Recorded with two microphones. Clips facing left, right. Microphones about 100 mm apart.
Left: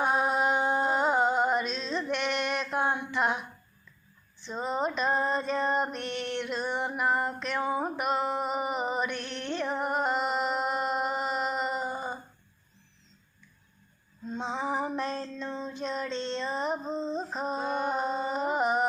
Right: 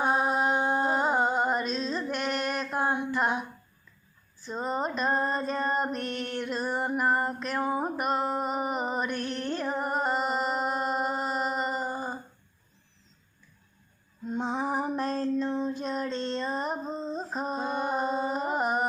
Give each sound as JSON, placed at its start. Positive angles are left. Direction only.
{"t": 0.0, "sound": "a sound", "side_deg": -30}
{"t": 0.3, "sound": "music", "side_deg": 0}
{"t": 1.6, "sound": "music", "side_deg": -40}
{"t": 1.9, "sound": "a sound", "side_deg": -5}
{"t": 4.4, "sound": "female singing", "side_deg": 0}
{"t": 6.4, "sound": "music", "side_deg": 0}
{"t": 14.3, "sound": "female singing", "side_deg": -10}
{"t": 14.6, "sound": "music", "side_deg": -10}
{"t": 15.3, "sound": "child singing", "side_deg": -15}
{"t": 15.8, "sound": "female singing", "side_deg": -5}
{"t": 16.2, "sound": "music", "side_deg": -5}